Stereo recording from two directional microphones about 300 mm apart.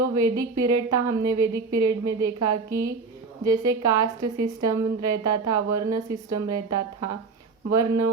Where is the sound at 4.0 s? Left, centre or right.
Right.